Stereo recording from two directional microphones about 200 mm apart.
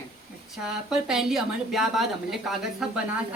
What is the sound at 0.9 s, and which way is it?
A woman's voice, 5° right (ahead or behind).